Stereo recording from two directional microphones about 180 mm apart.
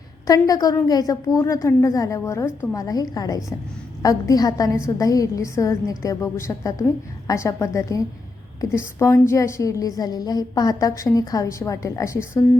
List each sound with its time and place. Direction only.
0.3 s a woman's voice: 20° left (ahead or behind)